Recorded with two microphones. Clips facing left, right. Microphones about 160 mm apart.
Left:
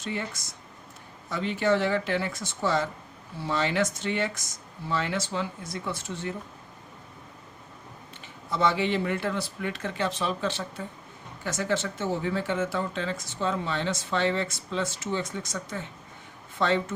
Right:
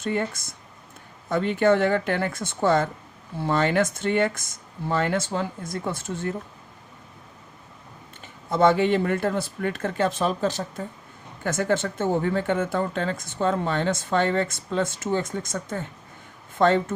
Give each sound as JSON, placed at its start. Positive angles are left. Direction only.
{"t": 0.0, "sound": "speech", "side_deg": -50}
{"t": 8.2, "sound": "speech", "side_deg": -50}
{"t": 11.4, "sound": "speech", "side_deg": -50}